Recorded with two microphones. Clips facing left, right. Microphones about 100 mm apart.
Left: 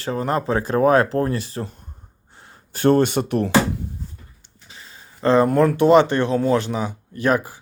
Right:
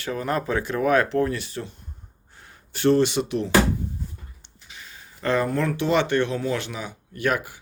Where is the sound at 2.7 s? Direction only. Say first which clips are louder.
Left 3 dB; 45° left (ahead or behind).